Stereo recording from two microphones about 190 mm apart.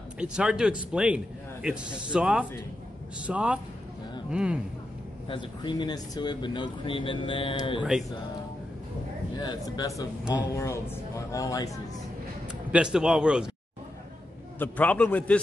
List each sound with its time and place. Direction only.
0.2 s speech: 5° right (ahead or behind)
5.3 s speech: 25° left (ahead or behind)
9.8 s speech: 15° left (ahead or behind)
12.7 s speech: 5° right (ahead or behind)
14.6 s speech: 10° left (ahead or behind)